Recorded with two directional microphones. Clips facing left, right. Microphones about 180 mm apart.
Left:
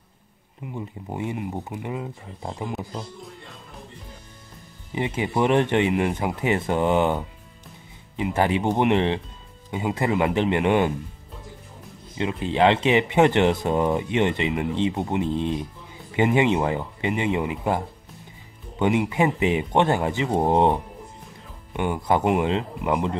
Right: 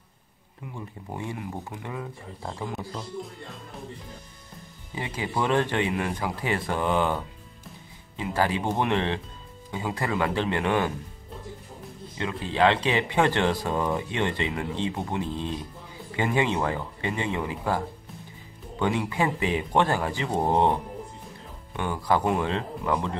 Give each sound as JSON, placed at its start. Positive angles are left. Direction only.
{"t": 0.7, "sound": "speech", "side_deg": 20}
{"t": 4.9, "sound": "speech", "side_deg": 20}
{"t": 12.2, "sound": "speech", "side_deg": 20}